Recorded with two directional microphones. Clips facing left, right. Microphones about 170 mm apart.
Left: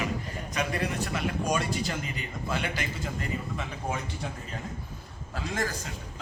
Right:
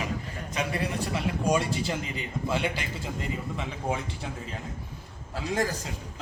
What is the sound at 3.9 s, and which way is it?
Speech, 30° right (ahead or behind).